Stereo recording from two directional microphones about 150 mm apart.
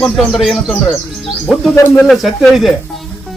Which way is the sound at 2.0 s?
Centre (ahead or behind).